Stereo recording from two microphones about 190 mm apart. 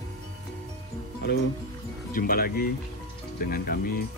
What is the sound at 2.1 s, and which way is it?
Speech, 50° left (ahead or behind).